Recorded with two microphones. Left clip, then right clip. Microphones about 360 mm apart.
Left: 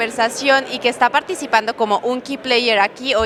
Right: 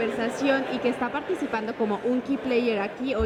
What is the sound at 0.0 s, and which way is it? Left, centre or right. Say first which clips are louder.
A woman's voice: left 8 dB; left.